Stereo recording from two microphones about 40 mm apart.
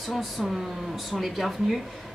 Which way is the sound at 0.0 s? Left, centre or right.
Centre.